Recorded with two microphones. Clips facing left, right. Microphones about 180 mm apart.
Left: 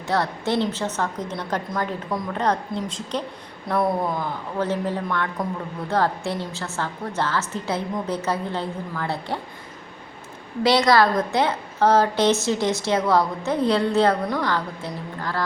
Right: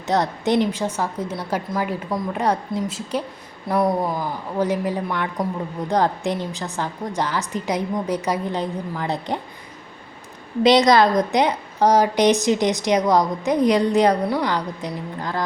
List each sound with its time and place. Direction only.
0.1 s a woman's voice: 20° right (ahead or behind)
10.6 s a woman's voice: 20° right (ahead or behind)